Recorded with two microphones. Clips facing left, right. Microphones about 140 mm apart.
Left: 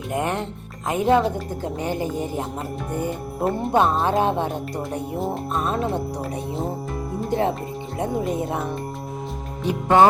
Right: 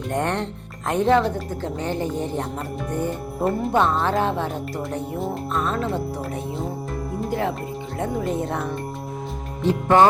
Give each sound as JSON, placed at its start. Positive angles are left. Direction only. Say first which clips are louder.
{"t": 0.1, "sound": "a woman's voice", "louder": "even", "side_deg": 5}
{"t": 3.5, "sound": "speech", "louder": "left 1 dB", "side_deg": 20}
{"t": 5.1, "sound": "speech", "louder": "left 3 dB", "side_deg": 0}
{"t": 5.5, "sound": "speech", "louder": "even", "side_deg": 25}
{"t": 7.3, "sound": "speech", "louder": "left 3 dB", "side_deg": 25}
{"t": 9.6, "sound": "a woman's voice", "louder": "even", "side_deg": 15}